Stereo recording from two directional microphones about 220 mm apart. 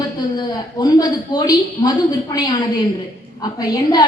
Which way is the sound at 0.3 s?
20° left (ahead or behind).